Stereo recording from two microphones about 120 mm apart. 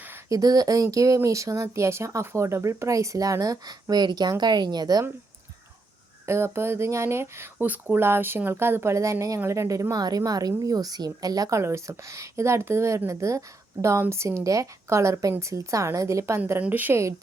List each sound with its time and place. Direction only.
0.3 s speech: 30° right (ahead or behind)
6.2 s speech: 20° right (ahead or behind)
16.4 s a woman's voice: 15° right (ahead or behind)